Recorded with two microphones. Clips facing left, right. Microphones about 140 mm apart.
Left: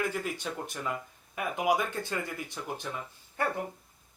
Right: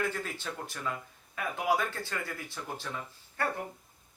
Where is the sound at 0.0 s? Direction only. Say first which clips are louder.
Left 2 dB; 15° left (ahead or behind).